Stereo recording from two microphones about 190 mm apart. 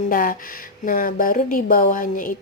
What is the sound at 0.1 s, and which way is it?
Speech, 45° left (ahead or behind).